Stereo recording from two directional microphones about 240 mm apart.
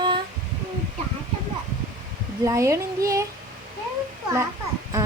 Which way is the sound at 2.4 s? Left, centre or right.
Centre.